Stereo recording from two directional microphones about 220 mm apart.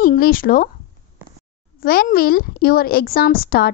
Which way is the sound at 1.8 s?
40° left (ahead or behind).